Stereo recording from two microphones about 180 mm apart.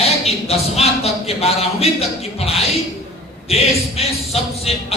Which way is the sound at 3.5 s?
35° left (ahead or behind).